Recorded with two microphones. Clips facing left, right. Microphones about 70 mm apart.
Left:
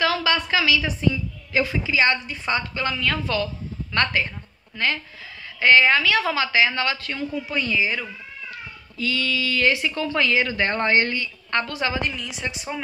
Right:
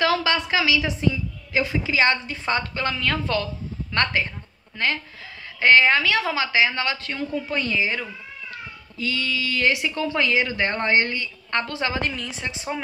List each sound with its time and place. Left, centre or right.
0.0 s a sound: right
1.5 s a woman's voice: right
7.3 s a woman's voice: right